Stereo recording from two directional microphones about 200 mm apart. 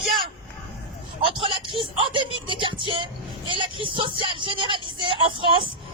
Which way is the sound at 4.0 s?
25° right (ahead or behind).